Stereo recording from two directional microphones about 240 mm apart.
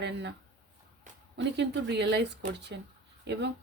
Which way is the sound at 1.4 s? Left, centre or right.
Right.